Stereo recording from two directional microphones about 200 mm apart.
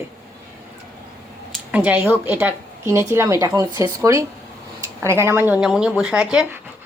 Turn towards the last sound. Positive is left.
turn(degrees=-5)  # may be behind; listen again after turning